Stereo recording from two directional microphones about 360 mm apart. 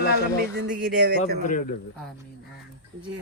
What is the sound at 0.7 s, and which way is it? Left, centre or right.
Speech, right.